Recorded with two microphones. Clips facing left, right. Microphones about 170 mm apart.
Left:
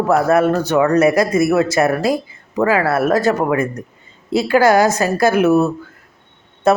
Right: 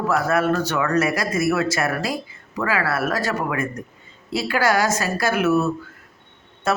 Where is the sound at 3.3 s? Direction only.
35° left (ahead or behind).